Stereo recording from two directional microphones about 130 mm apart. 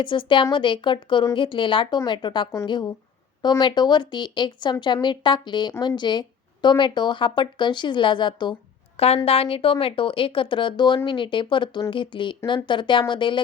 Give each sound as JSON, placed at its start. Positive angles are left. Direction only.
{"t": 0.0, "sound": "speech", "side_deg": 40}
{"t": 9.0, "sound": "speech", "side_deg": 50}